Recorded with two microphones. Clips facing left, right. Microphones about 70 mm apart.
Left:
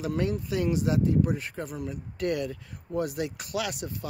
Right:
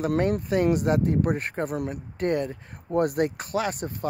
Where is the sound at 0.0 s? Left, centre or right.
Right.